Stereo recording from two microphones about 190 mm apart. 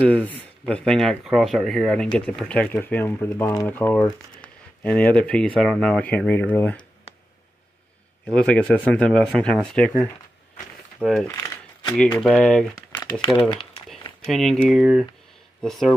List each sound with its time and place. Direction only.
0.0 s speech: 5° left (ahead or behind)
8.3 s speech: 5° left (ahead or behind)
11.2 s a sound: 15° left (ahead or behind)
12.0 s speech: 5° left (ahead or behind)
13.4 s speech: 25° left (ahead or behind)
14.2 s speech: centre (ahead or behind)